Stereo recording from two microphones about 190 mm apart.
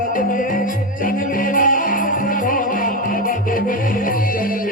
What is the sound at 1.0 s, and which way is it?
Music, 45° left (ahead or behind).